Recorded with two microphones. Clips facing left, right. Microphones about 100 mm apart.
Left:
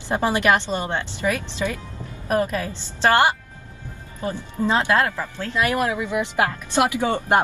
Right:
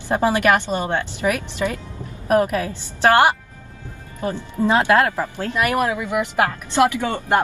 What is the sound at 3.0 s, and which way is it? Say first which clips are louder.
Speech: right 3 dB; 15° right (ahead or behind).